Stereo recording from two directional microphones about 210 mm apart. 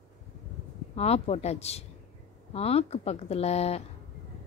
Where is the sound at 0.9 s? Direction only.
30° left (ahead or behind).